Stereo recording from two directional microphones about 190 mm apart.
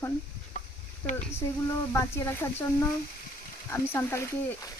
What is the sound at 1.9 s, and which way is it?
Speech, 15° left (ahead or behind).